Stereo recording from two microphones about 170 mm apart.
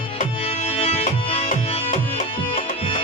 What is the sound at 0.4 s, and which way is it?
Music, 35° left (ahead or behind).